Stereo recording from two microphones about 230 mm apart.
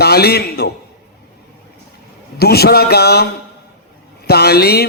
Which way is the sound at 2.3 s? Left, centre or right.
Left.